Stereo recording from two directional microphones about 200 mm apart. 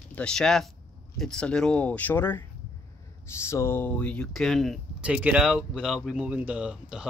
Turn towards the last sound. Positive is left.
turn(degrees=-5)  # may be behind; listen again after turning